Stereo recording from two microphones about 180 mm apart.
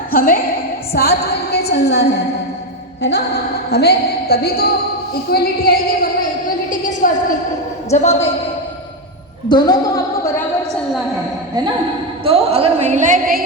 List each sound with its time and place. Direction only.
0.1 s a woman's voice: 55° left (ahead or behind)
5.3 s a sound: 55° left (ahead or behind)
7.9 s a woman's voice: 35° left (ahead or behind)
9.5 s speech: 20° left (ahead or behind)
12.2 s a woman's voice: 35° right (ahead or behind); by 13.4 s 50° right (ahead or behind)